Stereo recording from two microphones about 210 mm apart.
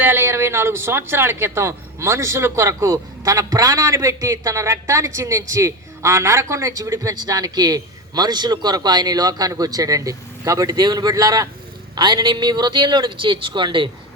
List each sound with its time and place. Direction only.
0.0 s a man's voice: 10° right (ahead or behind)